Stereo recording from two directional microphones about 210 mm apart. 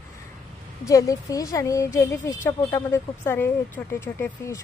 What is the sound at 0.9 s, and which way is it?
A woman's voice, 15° left (ahead or behind).